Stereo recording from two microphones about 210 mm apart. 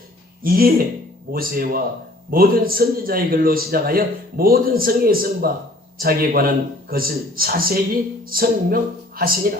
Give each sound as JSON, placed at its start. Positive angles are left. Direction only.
{"t": 0.4, "sound": "a man's voice", "side_deg": -45}